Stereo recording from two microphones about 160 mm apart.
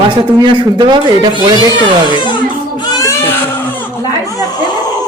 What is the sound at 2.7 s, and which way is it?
Baby cry, 25° left (ahead or behind).